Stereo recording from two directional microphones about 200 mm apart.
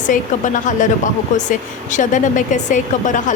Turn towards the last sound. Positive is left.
turn(degrees=40)  # may be behind; listen again after turning